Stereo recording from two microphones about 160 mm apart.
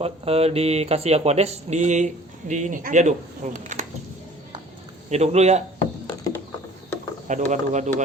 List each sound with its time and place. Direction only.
0.0 s speech: 40° right (ahead or behind)
5.0 s speech: 45° right (ahead or behind)
7.3 s speech: 50° right (ahead or behind)